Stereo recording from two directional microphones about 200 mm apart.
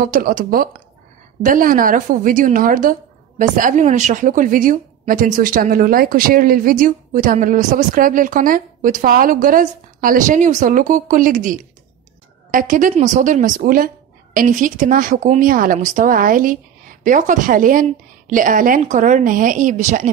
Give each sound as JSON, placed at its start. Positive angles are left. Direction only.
{"t": 0.0, "sound": "a woman's voice", "side_deg": -45}